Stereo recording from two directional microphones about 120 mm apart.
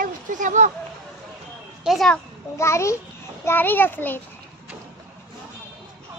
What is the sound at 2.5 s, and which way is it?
A child's voice, 25° left (ahead or behind).